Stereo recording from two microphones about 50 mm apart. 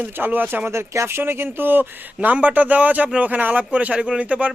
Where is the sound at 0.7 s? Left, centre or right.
Right.